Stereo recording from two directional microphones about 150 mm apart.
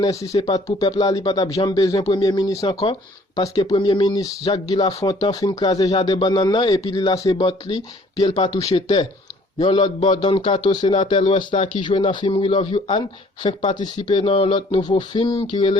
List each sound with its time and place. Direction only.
0.0 s speech: 20° left (ahead or behind)